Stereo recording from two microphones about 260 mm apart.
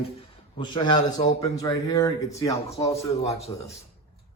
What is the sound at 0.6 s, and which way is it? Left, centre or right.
Mantra, centre.